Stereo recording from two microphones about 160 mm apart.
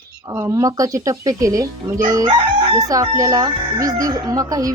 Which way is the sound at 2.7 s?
20° right (ahead or behind).